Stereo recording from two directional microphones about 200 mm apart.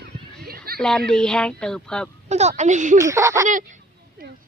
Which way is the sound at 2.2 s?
35° right (ahead or behind).